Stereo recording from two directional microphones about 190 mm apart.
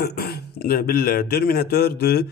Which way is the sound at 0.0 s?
55° left (ahead or behind).